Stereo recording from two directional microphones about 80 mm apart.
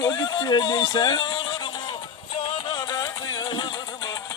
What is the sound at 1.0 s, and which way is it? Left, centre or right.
Speech, left.